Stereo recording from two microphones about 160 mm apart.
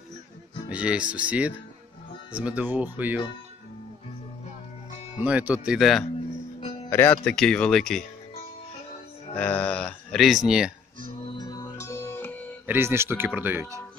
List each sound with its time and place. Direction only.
0.7 s speech: 5° right (ahead or behind)
5.1 s speech: 10° right (ahead or behind)
6.9 s speech: 15° left (ahead or behind)
7.2 s speech: 5° left (ahead or behind)
9.4 s speech: 10° left (ahead or behind)
11.2 s music: 25° left (ahead or behind)
12.6 s speech: 15° right (ahead or behind)